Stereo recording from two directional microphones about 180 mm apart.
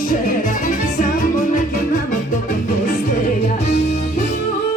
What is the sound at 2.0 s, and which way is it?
Music, 45° left (ahead or behind).